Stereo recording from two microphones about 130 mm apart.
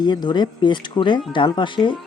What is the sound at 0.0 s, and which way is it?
Speech, 35° left (ahead or behind).